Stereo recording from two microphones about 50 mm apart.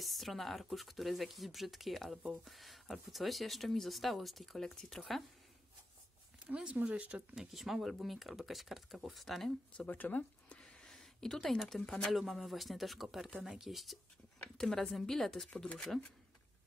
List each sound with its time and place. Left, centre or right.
0.0 s speech: centre
6.4 s speech: right
7.3 s speech: centre
9.8 s speech: left
10.9 s speech: centre
12.2 s speech: centre